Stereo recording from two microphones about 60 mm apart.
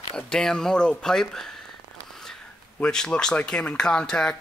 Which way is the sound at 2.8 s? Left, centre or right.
Centre.